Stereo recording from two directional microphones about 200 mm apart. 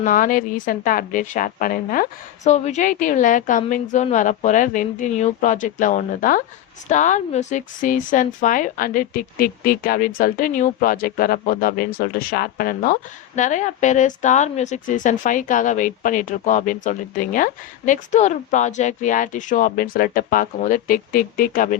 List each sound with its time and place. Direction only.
0.0 s speech: 40° left (ahead or behind)